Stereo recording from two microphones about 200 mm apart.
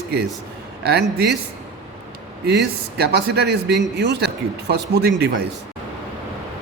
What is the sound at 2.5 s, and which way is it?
A man's voice, 60° right (ahead or behind).